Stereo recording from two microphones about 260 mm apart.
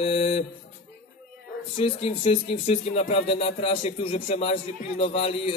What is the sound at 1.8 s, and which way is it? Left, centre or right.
A man's voice, left.